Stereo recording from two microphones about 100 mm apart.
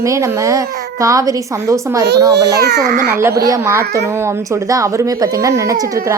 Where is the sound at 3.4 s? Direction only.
35° right (ahead or behind).